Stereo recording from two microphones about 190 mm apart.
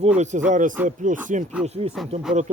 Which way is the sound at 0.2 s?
40° right (ahead or behind).